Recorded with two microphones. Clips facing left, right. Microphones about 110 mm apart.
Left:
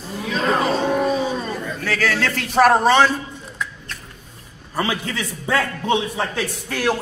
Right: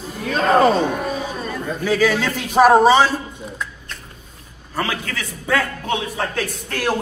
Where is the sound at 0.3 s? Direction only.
45° right (ahead or behind).